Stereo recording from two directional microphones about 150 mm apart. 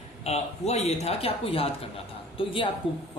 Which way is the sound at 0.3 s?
45° left (ahead or behind).